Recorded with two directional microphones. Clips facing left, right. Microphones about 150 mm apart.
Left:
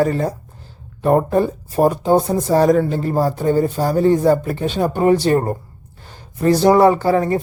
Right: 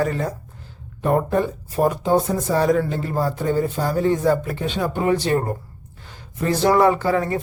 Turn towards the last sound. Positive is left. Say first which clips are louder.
# left 4 dB
turn(degrees=35)  # may be behind; listen again after turning